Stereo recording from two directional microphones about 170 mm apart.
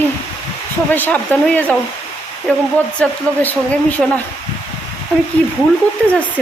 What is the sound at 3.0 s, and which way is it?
A woman's voice, 10° left (ahead or behind).